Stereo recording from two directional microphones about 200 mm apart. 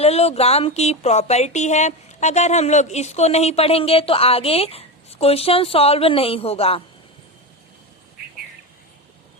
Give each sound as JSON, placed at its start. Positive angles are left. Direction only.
{"t": 0.0, "sound": "speech", "side_deg": 30}